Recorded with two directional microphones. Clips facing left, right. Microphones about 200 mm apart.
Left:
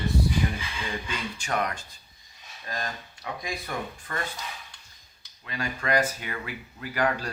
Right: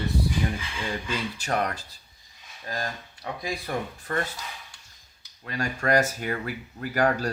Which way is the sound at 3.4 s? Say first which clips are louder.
Right 4 dB; 35° right (ahead or behind).